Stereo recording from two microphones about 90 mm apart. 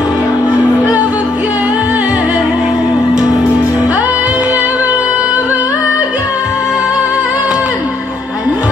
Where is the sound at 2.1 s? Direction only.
45° left (ahead or behind).